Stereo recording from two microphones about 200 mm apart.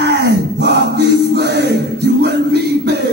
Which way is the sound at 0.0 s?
55° right (ahead or behind).